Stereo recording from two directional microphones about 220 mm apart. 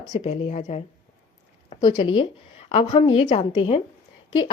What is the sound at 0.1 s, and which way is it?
A woman's voice, 30° left (ahead or behind).